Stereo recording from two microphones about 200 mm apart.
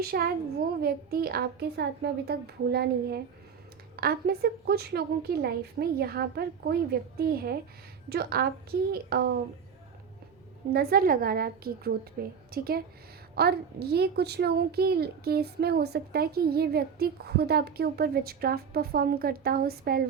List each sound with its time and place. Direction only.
0.1 s a child's voice: 50° right (ahead or behind)
10.7 s a child's voice: 50° right (ahead or behind)